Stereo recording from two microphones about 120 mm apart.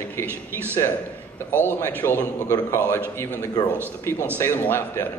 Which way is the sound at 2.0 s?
20° left (ahead or behind).